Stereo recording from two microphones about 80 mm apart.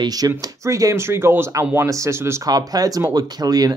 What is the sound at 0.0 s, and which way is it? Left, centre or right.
Speech, right.